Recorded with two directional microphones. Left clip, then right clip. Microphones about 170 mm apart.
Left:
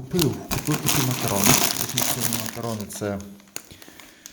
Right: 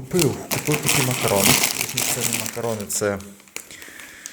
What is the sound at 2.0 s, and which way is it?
Speech, 40° left (ahead or behind).